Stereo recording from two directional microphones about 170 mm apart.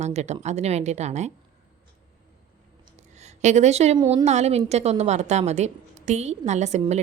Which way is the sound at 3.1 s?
45° right (ahead or behind).